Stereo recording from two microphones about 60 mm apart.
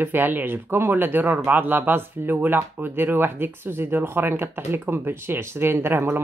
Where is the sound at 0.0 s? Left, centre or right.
Right.